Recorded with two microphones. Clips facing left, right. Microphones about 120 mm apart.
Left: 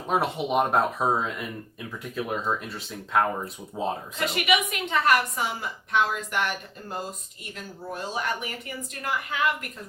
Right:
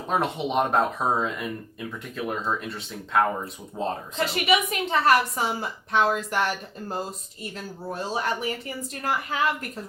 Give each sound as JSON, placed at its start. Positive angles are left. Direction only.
{"t": 0.1, "sound": "speech", "side_deg": 5}
{"t": 4.4, "sound": "a woman's voice", "side_deg": -35}